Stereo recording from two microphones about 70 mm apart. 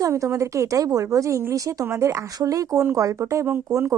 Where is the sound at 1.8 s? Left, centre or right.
Right.